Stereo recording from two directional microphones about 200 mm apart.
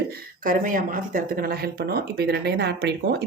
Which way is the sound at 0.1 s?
45° right (ahead or behind).